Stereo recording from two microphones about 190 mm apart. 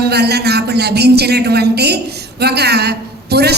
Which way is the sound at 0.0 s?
60° right (ahead or behind).